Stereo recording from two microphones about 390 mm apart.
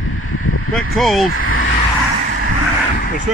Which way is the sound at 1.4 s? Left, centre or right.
Left.